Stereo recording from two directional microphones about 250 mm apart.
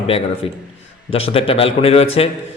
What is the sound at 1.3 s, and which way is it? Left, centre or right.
Speech, left.